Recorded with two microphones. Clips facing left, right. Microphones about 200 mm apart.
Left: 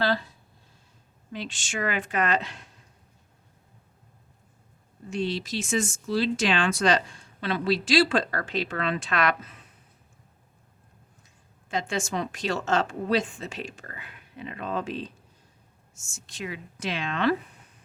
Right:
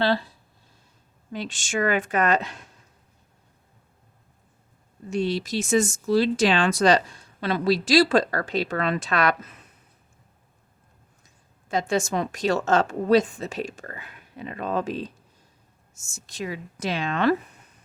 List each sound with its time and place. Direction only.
0.0 s speech: 30° right (ahead or behind)
1.3 s a woman's voice: 45° right (ahead or behind)
5.1 s speech: 45° right (ahead or behind)
11.7 s speech: 40° right (ahead or behind)